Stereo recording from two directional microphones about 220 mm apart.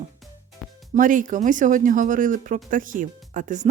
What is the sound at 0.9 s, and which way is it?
Speech, 35° right (ahead or behind).